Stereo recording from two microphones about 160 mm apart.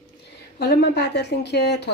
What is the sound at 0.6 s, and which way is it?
A woman's voice, 90° left.